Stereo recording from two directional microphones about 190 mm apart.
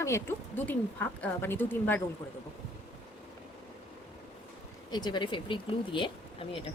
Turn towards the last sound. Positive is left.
turn(degrees=30)  # may be behind; listen again after turning